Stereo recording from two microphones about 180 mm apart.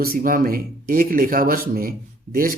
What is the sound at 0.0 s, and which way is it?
Speech, 55° right (ahead or behind).